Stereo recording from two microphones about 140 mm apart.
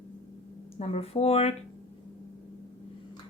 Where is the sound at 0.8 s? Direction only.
50° left (ahead or behind).